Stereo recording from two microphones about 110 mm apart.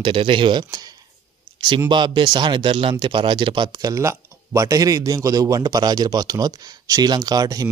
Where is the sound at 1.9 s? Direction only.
45° right (ahead or behind).